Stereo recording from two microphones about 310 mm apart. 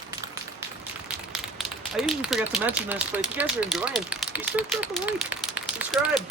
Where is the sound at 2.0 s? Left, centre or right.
Centre.